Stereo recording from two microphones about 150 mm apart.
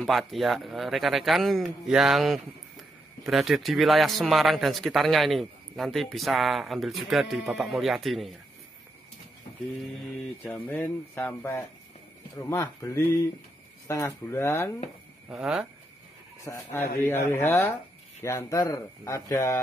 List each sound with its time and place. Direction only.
0.0 s speech: centre (ahead or behind)
10.4 s speech: 15° left (ahead or behind)
15.2 s speech: 5° right (ahead or behind)
16.4 s speech: 20° left (ahead or behind)